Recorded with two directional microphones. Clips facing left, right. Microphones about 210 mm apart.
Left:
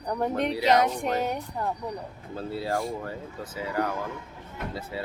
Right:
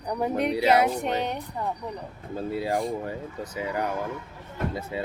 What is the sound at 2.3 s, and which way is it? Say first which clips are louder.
Speech: right 2 dB; 15° right (ahead or behind).